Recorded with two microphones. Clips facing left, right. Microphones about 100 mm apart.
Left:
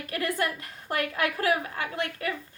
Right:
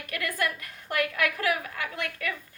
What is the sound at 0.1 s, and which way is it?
A woman's voice, 30° left (ahead or behind).